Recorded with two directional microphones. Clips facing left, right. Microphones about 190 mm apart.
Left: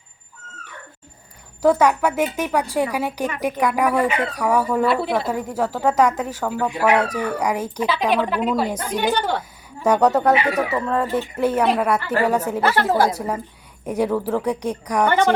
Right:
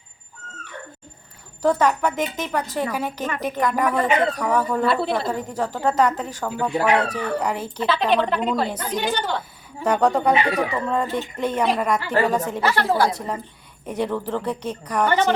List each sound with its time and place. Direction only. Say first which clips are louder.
1.6 s a woman's voice: left 3 dB; 10° left (ahead or behind)
9.1 s a woman's voice: left 3 dB; 60° left (ahead or behind)
9.8 s a woman's voice: left 2 dB; 10° left (ahead or behind)
12.6 s a woman's voice: left 2 dB; 45° left (ahead or behind)
13.1 s a woman's voice: left 3 dB; 10° left (ahead or behind)